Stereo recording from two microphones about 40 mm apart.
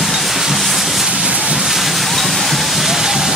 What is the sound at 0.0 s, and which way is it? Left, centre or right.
Train, centre.